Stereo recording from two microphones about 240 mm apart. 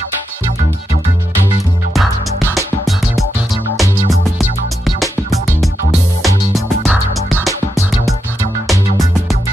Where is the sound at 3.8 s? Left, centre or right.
Centre.